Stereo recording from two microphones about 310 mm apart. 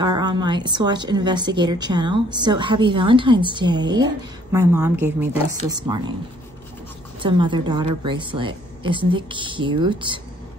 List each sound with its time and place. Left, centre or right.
0.0 s a woman's voice: centre
7.2 s a woman's voice: centre